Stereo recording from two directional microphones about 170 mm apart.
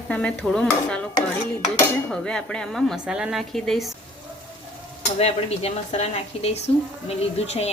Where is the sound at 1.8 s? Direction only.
5° left (ahead or behind).